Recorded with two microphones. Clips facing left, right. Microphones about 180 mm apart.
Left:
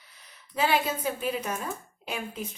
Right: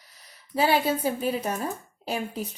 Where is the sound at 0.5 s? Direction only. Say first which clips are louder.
Right 3 dB; 35° right (ahead or behind).